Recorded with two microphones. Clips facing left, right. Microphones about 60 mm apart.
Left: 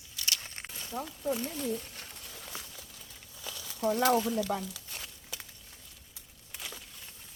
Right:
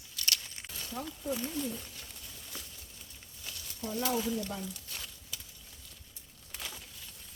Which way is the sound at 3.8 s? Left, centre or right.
Left.